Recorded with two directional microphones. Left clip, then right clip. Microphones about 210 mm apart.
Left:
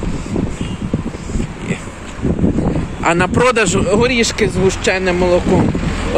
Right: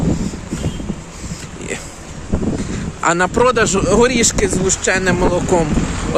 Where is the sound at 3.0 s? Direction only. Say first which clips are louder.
Even; 15° right (ahead or behind).